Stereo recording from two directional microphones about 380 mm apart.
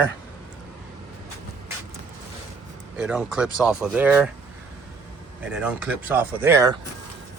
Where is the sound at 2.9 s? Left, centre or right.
Centre.